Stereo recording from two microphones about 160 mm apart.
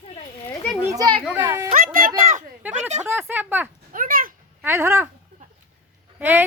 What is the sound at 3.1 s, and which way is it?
Speech, 15° right (ahead or behind).